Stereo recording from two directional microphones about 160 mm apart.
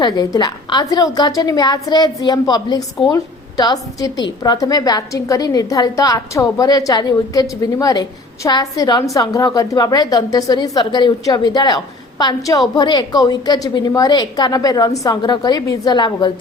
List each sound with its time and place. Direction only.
0.0 s a woman's voice: 25° left (ahead or behind)